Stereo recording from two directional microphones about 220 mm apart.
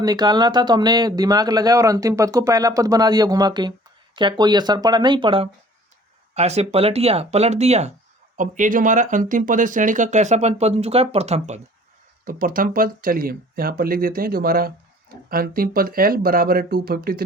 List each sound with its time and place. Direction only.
0.0 s speech: 20° right (ahead or behind); by 17.2 s 45° right (ahead or behind)